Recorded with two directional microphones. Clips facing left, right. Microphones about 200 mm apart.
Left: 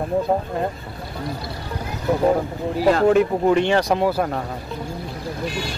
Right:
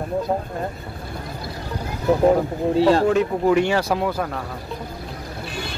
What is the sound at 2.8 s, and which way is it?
Speech, 30° right (ahead or behind).